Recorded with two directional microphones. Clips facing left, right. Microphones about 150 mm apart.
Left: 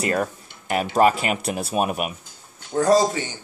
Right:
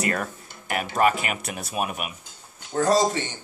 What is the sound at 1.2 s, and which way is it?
Speech, 30° left (ahead or behind).